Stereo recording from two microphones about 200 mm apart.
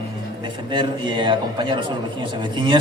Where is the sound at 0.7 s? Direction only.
25° right (ahead or behind).